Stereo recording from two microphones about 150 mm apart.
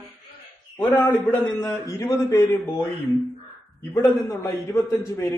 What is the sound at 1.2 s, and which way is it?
A man's voice, 20° left (ahead or behind).